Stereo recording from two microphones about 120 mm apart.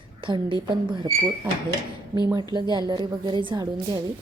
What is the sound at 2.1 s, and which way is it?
A woman's voice, 35° right (ahead or behind).